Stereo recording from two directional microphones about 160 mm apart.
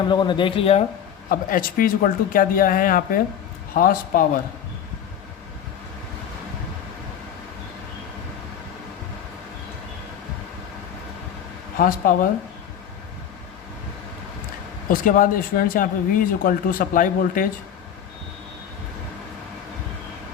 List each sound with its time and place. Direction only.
0.1 s a man's voice: 30° left (ahead or behind)
1.3 s speech: 60° left (ahead or behind)
11.8 s speech: 60° left (ahead or behind)
14.8 s speech: 60° left (ahead or behind)